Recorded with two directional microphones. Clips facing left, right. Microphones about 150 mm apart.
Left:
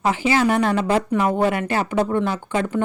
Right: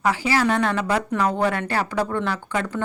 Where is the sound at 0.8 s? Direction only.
25° left (ahead or behind).